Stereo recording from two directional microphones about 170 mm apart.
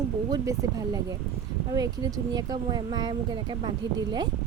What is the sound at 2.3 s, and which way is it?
Speech, 25° right (ahead or behind).